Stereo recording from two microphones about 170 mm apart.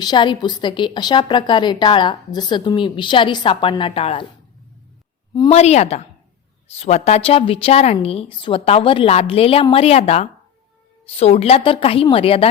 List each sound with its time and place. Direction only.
0.0 s a woman's voice: 25° left (ahead or behind)
5.5 s a woman's voice: 40° left (ahead or behind)